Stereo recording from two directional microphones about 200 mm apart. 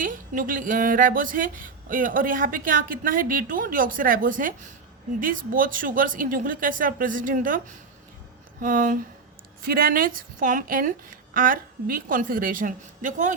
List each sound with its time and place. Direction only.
0.0 s a woman's voice: 45° right (ahead or behind)